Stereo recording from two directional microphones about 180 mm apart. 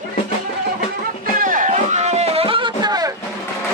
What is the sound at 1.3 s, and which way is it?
Music, 50° right (ahead or behind).